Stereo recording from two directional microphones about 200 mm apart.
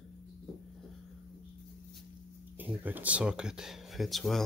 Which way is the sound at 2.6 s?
10° right (ahead or behind).